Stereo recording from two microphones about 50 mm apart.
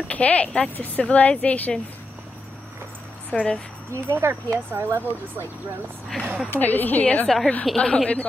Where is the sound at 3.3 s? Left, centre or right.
Centre.